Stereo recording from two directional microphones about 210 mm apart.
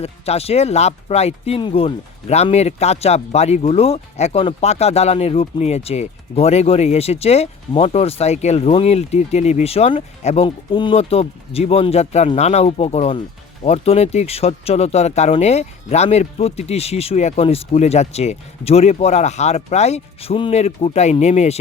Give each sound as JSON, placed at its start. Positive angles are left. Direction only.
{"t": 0.0, "sound": "speech", "side_deg": 30}